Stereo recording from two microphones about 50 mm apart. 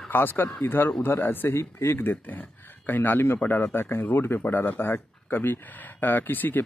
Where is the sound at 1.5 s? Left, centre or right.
Left.